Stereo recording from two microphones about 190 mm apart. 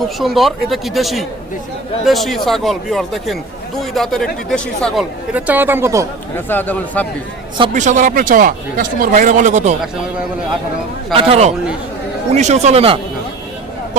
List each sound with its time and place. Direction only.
0.0 s speech: centre (ahead or behind)
6.3 s speech: 10° left (ahead or behind)
7.7 s speech: 40° right (ahead or behind)
11.1 s speech: 30° right (ahead or behind)